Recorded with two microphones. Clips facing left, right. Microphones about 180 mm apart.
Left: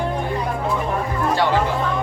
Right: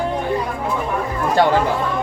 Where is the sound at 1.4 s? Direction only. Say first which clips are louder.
Right 6 dB; 50° right (ahead or behind).